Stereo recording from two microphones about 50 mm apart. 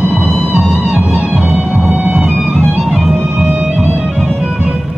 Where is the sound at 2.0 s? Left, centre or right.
Right.